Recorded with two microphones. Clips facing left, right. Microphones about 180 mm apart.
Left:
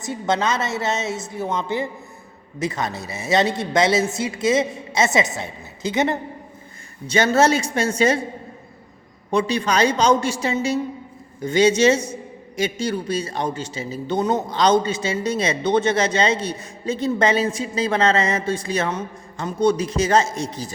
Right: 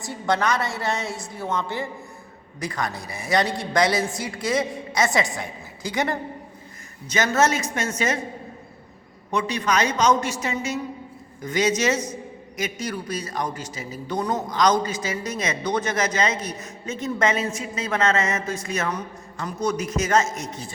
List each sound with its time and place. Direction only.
0.0 s a man's voice: 20° left (ahead or behind)
9.3 s a woman's voice: 30° left (ahead or behind)